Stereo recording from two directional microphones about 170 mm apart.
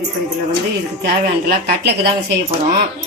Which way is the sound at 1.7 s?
75° right (ahead or behind).